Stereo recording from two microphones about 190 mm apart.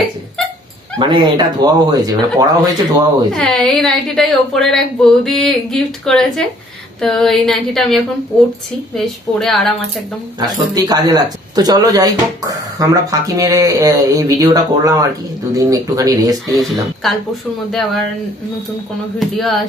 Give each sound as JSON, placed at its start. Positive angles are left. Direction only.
{"t": 0.9, "sound": "speech", "side_deg": -25}
{"t": 3.3, "sound": "a woman's voice", "side_deg": 5}
{"t": 10.4, "sound": "speech", "side_deg": -20}
{"t": 17.0, "sound": "a woman's voice", "side_deg": 0}
{"t": 19.1, "sound": "a woman's voice", "side_deg": 0}